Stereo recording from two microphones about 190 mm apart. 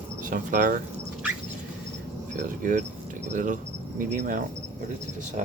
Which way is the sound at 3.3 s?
45° right (ahead or behind).